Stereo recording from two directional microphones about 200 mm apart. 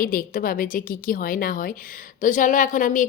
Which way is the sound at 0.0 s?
45° left (ahead or behind).